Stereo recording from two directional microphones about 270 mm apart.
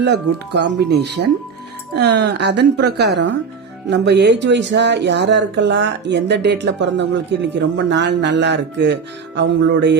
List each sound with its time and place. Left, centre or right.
0.0 s speech: right